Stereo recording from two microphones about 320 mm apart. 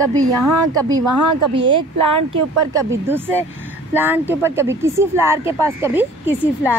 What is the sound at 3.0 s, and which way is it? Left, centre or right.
Speech, centre.